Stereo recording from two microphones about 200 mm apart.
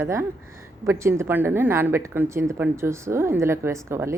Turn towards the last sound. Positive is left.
turn(degrees=-15)  # may be behind; listen again after turning